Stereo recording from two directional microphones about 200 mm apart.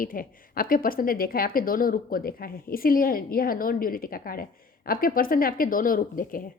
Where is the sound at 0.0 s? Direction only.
45° left (ahead or behind).